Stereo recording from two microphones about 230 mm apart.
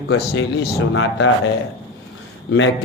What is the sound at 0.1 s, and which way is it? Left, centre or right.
A man's voice, left.